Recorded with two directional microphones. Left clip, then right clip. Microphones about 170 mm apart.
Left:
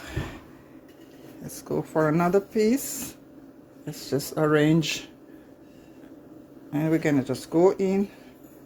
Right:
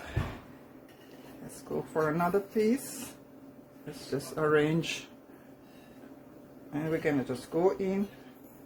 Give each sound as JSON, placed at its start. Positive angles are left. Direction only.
{"t": 1.9, "sound": "speech", "side_deg": 55}
{"t": 4.1, "sound": "speech", "side_deg": 55}
{"t": 6.7, "sound": "speech", "side_deg": 60}